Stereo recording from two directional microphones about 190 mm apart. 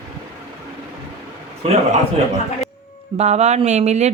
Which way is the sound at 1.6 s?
35° right (ahead or behind).